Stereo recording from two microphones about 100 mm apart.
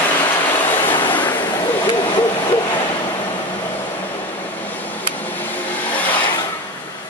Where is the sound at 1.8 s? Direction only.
50° left (ahead or behind).